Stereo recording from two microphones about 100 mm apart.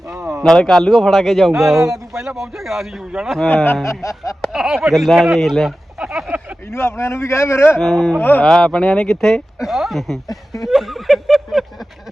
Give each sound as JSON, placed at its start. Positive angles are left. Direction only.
{"t": 0.1, "sound": "a sound", "side_deg": -5}
{"t": 0.4, "sound": "speech", "side_deg": 5}
{"t": 3.5, "sound": "a man's voice", "side_deg": 20}
{"t": 4.0, "sound": "a sound", "side_deg": 30}
{"t": 4.4, "sound": "speech", "side_deg": -5}
{"t": 6.7, "sound": "a man's voice", "side_deg": 25}
{"t": 7.8, "sound": "speech", "side_deg": 0}
{"t": 8.2, "sound": "a man's voice", "side_deg": 20}
{"t": 8.4, "sound": "speech", "side_deg": 5}
{"t": 10.6, "sound": "a sound", "side_deg": 0}